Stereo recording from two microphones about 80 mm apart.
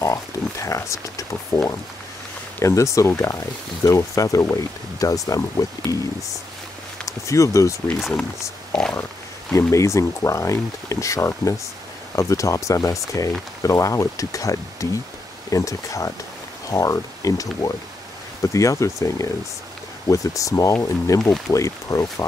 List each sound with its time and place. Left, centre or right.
0.0 s speech: left
2.6 s speech: left
7.1 s speech: left
8.7 s speech: centre
9.5 s speech: left